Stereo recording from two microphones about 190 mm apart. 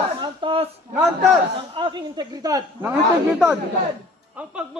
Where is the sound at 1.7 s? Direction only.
25° right (ahead or behind).